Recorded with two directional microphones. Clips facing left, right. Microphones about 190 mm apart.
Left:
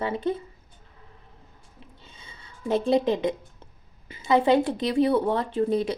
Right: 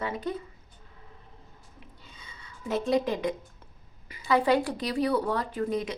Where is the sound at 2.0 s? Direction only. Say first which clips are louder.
Left 1 dB; 25° left (ahead or behind).